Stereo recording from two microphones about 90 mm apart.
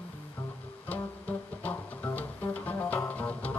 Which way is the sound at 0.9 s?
20° left (ahead or behind).